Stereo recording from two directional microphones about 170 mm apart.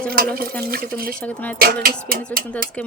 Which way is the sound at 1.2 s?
10° left (ahead or behind).